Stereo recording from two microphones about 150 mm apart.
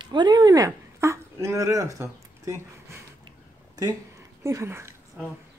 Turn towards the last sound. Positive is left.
turn(degrees=-15)  # may be behind; listen again after turning